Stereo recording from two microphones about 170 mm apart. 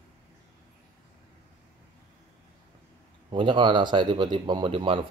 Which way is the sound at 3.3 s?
30° right (ahead or behind).